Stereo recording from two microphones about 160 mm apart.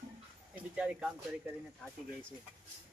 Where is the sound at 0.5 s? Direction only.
5° right (ahead or behind).